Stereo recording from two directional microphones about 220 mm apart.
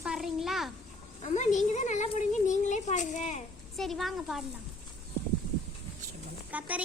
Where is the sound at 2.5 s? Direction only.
35° left (ahead or behind).